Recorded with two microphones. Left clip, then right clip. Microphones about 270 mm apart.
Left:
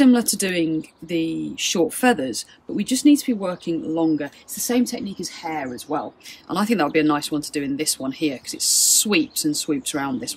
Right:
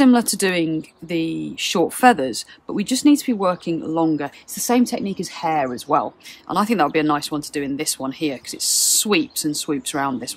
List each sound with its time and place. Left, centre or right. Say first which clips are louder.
0.0 s speech: right 2 dB; centre
6.5 s speech: right 2 dB; centre